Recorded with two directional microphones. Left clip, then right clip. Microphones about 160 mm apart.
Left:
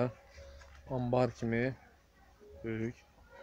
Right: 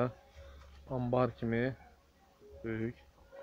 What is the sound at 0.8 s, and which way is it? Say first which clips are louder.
Speech: left 1 dB; 20° left (ahead or behind).